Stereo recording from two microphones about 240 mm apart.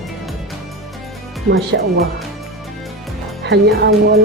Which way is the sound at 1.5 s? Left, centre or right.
Right.